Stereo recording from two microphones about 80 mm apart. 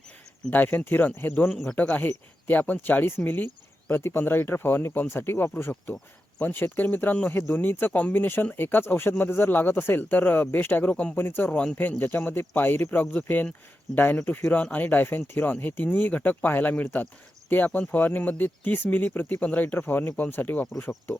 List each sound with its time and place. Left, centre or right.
0.5 s speech: left